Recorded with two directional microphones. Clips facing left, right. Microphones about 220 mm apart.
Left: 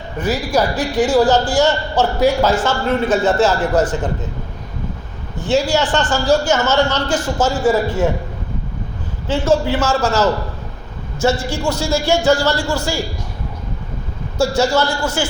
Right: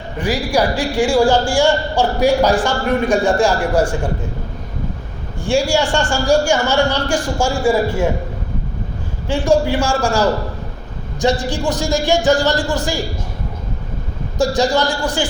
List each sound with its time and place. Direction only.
0.2 s a man's voice: 15° right (ahead or behind)
5.4 s a man's voice: 10° right (ahead or behind)
9.2 s a man's voice: 15° right (ahead or behind)
14.3 s a man's voice: 15° right (ahead or behind)